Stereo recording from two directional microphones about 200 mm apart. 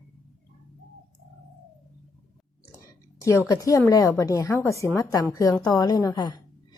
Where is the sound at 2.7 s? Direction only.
15° left (ahead or behind).